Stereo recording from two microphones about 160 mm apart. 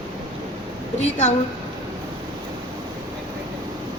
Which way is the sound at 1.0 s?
45° left (ahead or behind).